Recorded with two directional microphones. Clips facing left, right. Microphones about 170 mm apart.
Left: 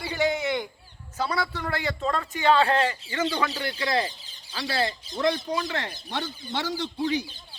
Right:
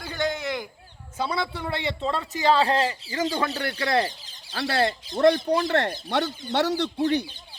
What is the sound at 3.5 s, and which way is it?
Speech, 60° right (ahead or behind).